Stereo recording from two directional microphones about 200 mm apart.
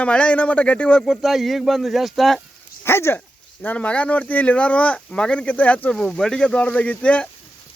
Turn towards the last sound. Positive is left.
turn(degrees=5)  # may be behind; listen again after turning